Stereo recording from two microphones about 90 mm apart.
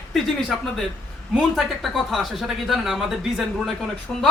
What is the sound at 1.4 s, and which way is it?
Speech, centre (ahead or behind).